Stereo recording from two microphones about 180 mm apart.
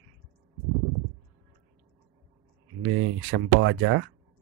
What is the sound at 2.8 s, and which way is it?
Speech, 90° right.